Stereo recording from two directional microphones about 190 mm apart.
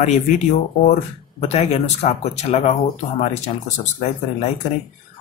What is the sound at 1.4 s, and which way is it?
Speech, 35° left (ahead or behind).